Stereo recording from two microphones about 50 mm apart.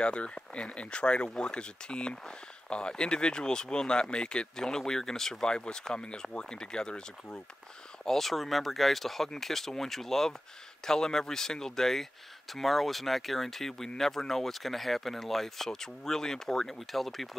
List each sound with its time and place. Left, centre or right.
0.0 s speech: centre